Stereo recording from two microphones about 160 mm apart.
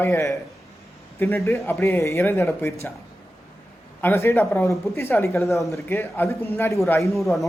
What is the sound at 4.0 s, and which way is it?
Speech, 15° left (ahead or behind).